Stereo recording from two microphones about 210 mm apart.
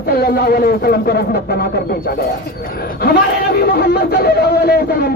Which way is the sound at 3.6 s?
50° left (ahead or behind).